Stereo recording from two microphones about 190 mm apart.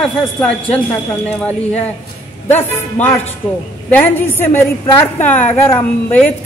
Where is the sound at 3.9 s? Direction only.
10° left (ahead or behind).